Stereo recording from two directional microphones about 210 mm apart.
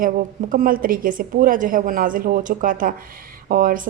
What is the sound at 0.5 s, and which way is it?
A woman's voice, 40° right (ahead or behind).